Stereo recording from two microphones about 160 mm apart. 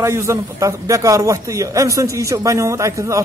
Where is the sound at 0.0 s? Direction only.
15° right (ahead or behind).